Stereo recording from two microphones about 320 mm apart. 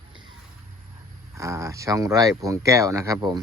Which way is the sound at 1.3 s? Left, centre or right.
Centre.